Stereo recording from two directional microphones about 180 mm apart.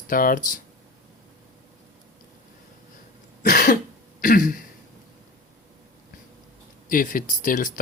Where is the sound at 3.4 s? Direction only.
50° left (ahead or behind).